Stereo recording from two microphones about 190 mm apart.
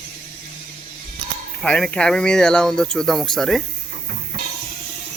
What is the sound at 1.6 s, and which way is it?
Speech, 5° left (ahead or behind).